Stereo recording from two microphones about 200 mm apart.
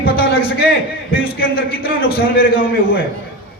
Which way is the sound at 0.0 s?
50° left (ahead or behind).